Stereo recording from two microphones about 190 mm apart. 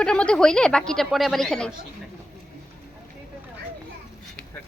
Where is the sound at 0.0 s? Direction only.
5° left (ahead or behind).